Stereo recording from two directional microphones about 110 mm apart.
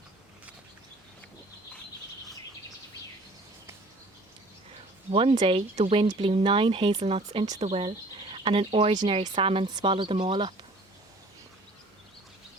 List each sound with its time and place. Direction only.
5.1 s speech: 55° right (ahead or behind)